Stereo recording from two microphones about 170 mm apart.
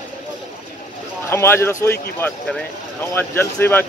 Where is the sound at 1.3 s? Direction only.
15° left (ahead or behind).